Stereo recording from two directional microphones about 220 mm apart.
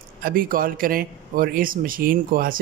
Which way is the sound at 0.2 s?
40° right (ahead or behind).